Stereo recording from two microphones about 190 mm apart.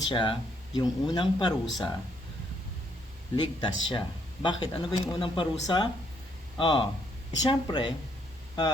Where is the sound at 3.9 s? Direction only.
25° left (ahead or behind).